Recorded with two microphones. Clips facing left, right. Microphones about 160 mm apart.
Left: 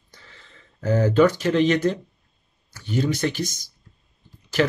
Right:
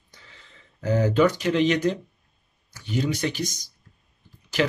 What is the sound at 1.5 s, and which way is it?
Speech, 50° left (ahead or behind).